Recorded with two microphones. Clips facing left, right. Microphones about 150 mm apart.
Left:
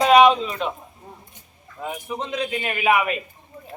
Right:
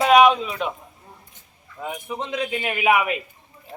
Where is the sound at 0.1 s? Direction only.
5° right (ahead or behind).